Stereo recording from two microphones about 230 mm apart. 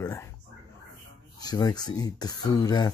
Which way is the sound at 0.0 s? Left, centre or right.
Centre.